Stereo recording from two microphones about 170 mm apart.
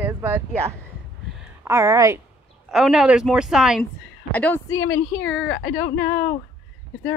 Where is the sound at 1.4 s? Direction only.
15° right (ahead or behind).